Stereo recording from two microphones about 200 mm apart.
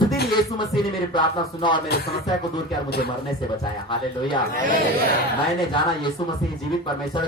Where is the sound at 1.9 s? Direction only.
55° left (ahead or behind).